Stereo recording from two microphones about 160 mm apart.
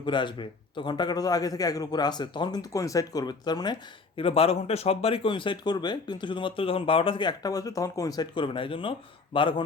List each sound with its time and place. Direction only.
0.0 s a man's voice: 30° left (ahead or behind)
4.2 s speech: 35° left (ahead or behind)